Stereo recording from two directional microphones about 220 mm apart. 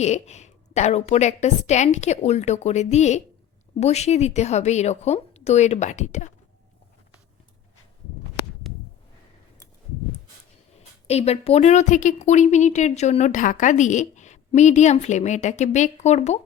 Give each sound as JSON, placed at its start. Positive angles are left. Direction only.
{"t": 0.0, "sound": "a woman's voice", "side_deg": 30}
{"t": 11.0, "sound": "a woman's voice", "side_deg": 30}